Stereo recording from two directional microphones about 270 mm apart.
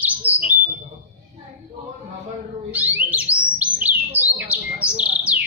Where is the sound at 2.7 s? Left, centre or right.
Centre.